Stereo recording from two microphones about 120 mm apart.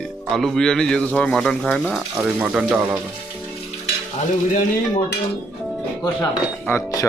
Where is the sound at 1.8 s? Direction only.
10° right (ahead or behind).